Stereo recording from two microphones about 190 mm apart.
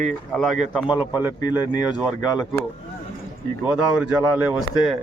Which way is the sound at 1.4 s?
20° left (ahead or behind).